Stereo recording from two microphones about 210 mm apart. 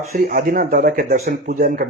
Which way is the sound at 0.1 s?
45° right (ahead or behind).